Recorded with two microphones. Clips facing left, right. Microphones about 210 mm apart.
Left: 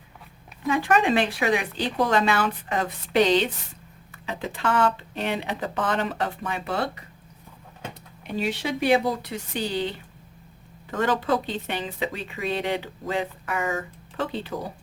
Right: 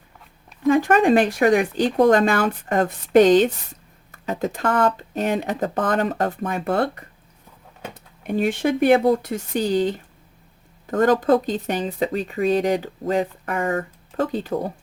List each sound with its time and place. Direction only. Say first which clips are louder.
0.7 s speech: right 6 dB; 50° right (ahead or behind)
8.2 s speech: right 7 dB; 50° right (ahead or behind)